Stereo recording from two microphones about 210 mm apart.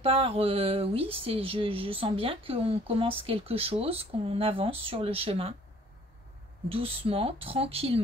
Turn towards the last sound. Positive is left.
turn(degrees=-30)  # may be behind; listen again after turning